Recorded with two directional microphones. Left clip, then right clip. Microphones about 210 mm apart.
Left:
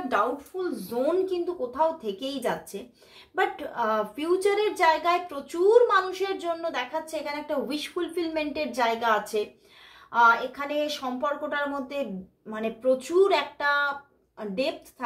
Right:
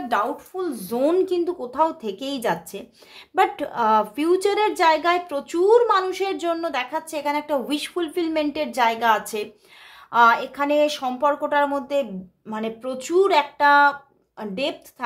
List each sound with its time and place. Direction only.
0.1 s a woman's voice: 45° right (ahead or behind)